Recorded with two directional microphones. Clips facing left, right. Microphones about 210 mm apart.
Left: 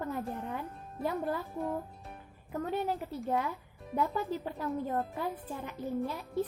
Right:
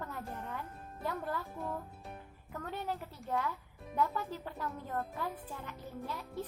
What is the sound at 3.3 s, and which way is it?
A woman's voice, 15° left (ahead or behind).